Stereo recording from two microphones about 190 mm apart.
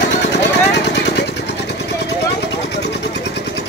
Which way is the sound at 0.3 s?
65° left (ahead or behind).